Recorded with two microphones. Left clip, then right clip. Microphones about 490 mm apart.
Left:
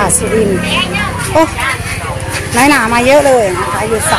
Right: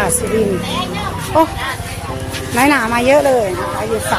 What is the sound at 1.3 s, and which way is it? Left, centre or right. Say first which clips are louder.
Speech: left 3 dB; right.